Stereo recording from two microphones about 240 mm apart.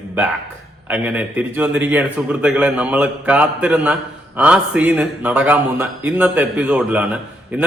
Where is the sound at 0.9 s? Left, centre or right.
Centre.